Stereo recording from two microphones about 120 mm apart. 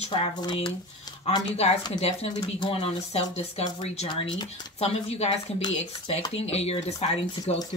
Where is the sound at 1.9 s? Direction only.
60° left (ahead or behind).